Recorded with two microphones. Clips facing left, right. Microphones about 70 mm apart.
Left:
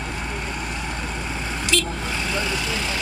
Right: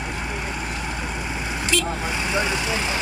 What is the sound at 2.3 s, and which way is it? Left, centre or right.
Speech, centre.